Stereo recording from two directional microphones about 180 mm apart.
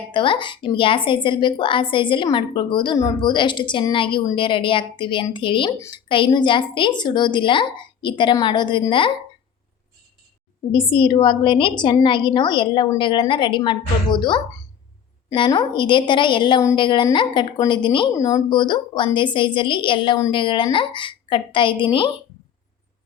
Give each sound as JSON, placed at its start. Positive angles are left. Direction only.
{"t": 0.1, "sound": "a woman's voice", "side_deg": 25}
{"t": 10.7, "sound": "a woman's voice", "side_deg": 30}